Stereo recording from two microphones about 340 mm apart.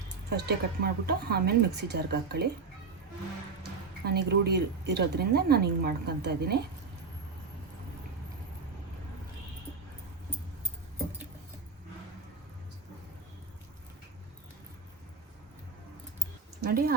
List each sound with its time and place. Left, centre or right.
0.3 s speech: right
4.0 s speech: right
16.6 s a sound: right